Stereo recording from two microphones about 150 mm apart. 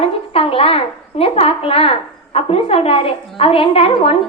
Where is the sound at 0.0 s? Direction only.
40° left (ahead or behind).